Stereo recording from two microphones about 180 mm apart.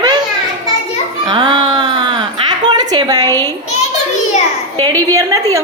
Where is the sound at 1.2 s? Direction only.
25° right (ahead or behind).